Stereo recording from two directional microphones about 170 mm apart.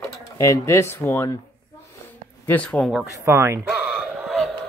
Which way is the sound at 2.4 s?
10° left (ahead or behind).